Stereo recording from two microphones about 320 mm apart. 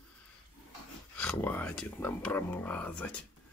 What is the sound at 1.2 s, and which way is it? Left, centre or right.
Speech, centre.